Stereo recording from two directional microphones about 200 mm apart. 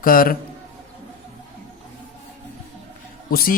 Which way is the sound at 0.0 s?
45° left (ahead or behind).